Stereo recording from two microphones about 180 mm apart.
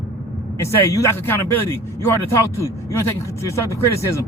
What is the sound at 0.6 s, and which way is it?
Speech, 15° left (ahead or behind).